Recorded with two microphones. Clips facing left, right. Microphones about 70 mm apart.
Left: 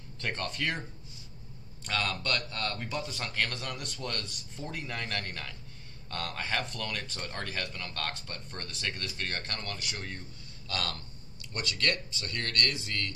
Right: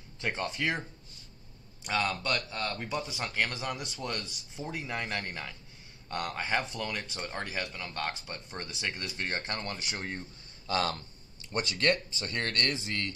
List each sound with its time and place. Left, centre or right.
0.2 s speech: centre
1.9 s speech: centre